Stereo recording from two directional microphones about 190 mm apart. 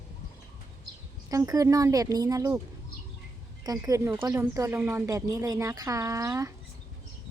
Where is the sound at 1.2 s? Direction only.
20° right (ahead or behind).